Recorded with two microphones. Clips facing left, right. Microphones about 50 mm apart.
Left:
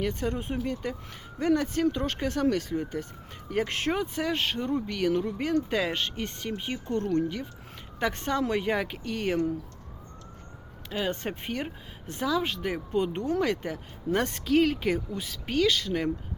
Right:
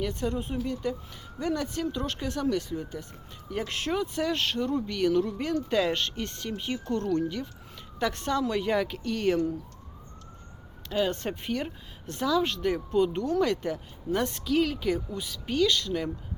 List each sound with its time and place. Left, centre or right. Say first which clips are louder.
0.0 s speech: even; left
10.8 s speech: right 3 dB; left
13.0 s speech: right 2 dB; left
13.7 s speech: left 1 dB; left